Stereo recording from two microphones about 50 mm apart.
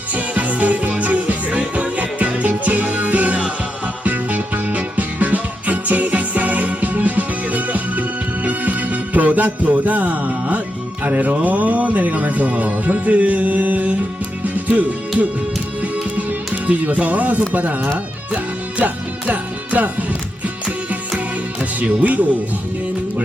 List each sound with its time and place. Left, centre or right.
0.1 s music: right
11.0 s speech: right
14.4 s music: right
16.6 s speech: right
19.3 s speech: right
21.6 s speech: right